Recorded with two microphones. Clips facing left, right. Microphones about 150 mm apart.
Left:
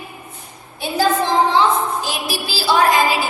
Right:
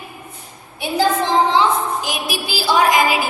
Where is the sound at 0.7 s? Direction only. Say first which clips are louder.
Even; 15° right (ahead or behind).